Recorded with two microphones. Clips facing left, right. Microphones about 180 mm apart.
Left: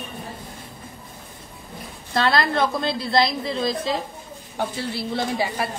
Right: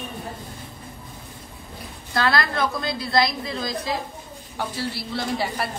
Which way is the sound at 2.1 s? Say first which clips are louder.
Left 2 dB; 25° left (ahead or behind).